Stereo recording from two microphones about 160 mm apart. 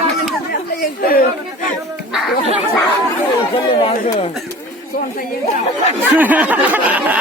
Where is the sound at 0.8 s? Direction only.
65° left (ahead or behind).